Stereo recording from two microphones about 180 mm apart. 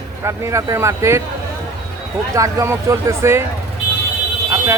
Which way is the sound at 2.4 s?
20° right (ahead or behind).